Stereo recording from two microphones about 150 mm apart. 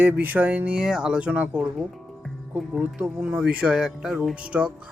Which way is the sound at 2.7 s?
10° right (ahead or behind).